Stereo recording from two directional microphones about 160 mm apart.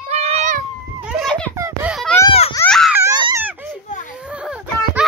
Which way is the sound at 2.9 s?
15° right (ahead or behind).